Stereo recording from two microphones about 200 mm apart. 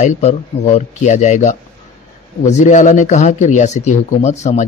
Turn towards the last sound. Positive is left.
turn(degrees=35)  # may be behind; listen again after turning